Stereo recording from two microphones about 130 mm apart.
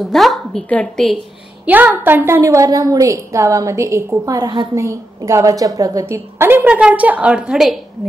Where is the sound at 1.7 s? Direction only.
15° right (ahead or behind).